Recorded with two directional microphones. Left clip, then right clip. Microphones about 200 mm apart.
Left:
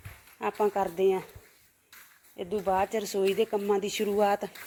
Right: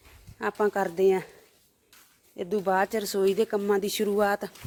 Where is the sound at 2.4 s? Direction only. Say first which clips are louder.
Right 2 dB; 40° right (ahead or behind).